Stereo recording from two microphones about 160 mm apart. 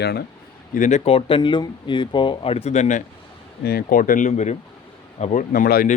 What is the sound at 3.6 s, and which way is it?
Speech, 75° left (ahead or behind).